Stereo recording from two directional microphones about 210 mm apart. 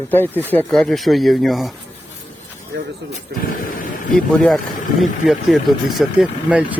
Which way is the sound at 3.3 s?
50° right (ahead or behind).